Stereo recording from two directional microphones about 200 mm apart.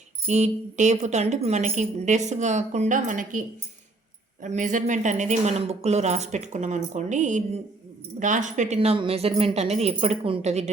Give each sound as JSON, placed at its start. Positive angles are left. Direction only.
{"t": 0.3, "sound": "a woman's voice", "side_deg": -35}
{"t": 4.4, "sound": "a woman's voice", "side_deg": -40}